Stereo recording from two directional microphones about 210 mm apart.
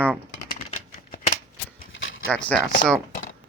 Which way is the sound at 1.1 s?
35° left (ahead or behind).